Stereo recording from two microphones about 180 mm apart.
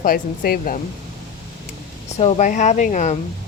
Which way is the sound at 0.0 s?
55° left (ahead or behind).